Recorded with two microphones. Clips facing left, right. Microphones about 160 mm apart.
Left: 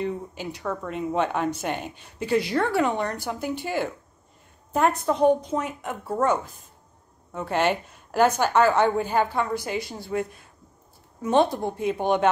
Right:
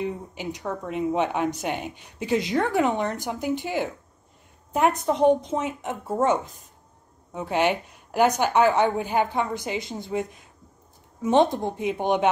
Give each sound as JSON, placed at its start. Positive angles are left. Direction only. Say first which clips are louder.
{"t": 0.0, "sound": "a woman's voice", "louder": "left 1 dB", "side_deg": -15}